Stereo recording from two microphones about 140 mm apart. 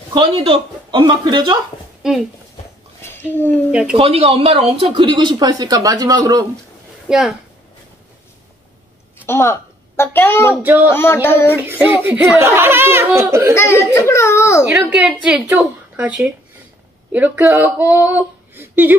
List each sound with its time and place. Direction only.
0.1 s speech: 40° right (ahead or behind)
2.0 s a woman's voice: 5° right (ahead or behind)
3.0 s a sound: 15° left (ahead or behind)
3.9 s speech: 45° right (ahead or behind); by 6.4 s 25° right (ahead or behind)
7.1 s a woman's voice: 5° right (ahead or behind)
9.2 s a woman's voice: 15° left (ahead or behind)
10.5 s a child's voice: 15° right (ahead or behind)
10.9 s a sound: 15° left (ahead or behind)
11.5 s a child's voice: 15° right (ahead or behind)
13.6 s a sound: 15° left (ahead or behind)
13.9 s a child's voice: 20° left (ahead or behind)
14.7 s a woman's voice: 5° right (ahead or behind)